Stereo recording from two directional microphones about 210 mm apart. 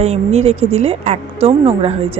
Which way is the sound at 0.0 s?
30° right (ahead or behind).